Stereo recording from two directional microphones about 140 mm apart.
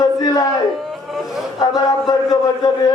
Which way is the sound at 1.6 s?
25° left (ahead or behind).